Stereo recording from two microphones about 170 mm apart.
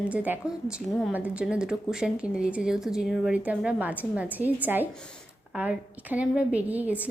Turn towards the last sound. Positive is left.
turn(degrees=-10)  # may be behind; listen again after turning